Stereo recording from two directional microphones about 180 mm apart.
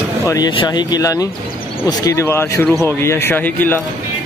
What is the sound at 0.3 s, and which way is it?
Speech, 25° left (ahead or behind).